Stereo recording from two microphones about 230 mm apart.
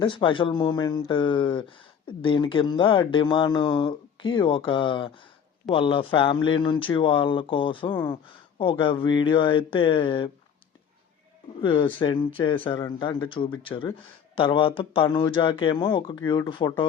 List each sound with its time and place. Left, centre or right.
0.0 s speech: left
11.6 s speech: left